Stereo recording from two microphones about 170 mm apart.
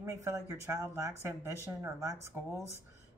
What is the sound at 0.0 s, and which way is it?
Speech, 15° right (ahead or behind).